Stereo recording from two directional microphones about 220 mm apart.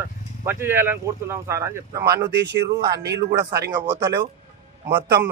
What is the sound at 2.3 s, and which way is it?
Speech, 50° right (ahead or behind).